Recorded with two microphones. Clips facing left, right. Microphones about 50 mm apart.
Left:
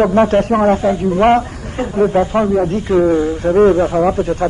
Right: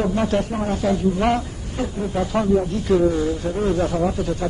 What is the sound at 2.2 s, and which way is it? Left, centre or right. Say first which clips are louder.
A man's voice: left 5 dB; left.